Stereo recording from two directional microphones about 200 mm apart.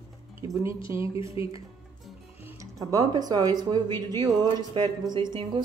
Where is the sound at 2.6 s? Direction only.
15° right (ahead or behind).